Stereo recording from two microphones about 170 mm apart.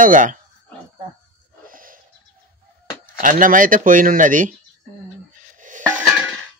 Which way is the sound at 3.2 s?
50° right (ahead or behind).